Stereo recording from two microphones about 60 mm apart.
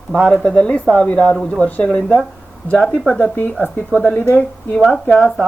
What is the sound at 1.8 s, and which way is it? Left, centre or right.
Speech, centre.